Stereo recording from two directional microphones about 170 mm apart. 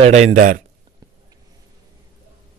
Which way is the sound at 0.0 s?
40° right (ahead or behind).